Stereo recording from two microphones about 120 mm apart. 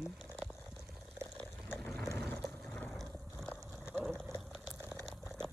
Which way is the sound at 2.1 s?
10° left (ahead or behind).